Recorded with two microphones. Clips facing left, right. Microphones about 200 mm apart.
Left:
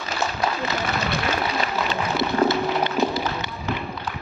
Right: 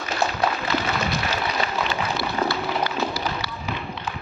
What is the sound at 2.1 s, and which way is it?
Run, 20° left (ahead or behind).